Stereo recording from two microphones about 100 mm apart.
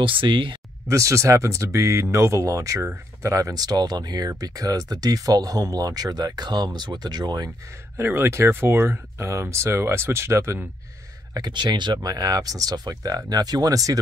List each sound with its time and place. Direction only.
0.0 s speech: 60° right (ahead or behind)
0.8 s speech: 30° right (ahead or behind)
8.0 s speech: 25° right (ahead or behind)
11.3 s speech: 45° right (ahead or behind)